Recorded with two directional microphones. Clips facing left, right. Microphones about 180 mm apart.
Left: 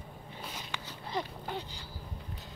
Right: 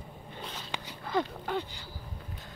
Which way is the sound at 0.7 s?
20° right (ahead or behind).